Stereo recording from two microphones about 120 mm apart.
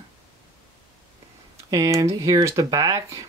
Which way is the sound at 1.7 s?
30° right (ahead or behind).